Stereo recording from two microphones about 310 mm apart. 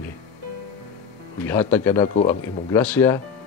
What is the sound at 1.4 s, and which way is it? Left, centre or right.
Speech, centre.